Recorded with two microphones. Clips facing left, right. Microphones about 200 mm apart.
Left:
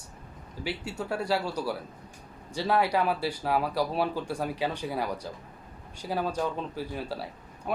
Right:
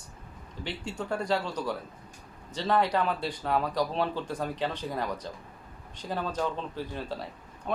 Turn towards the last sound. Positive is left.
turn(degrees=10)  # may be behind; listen again after turning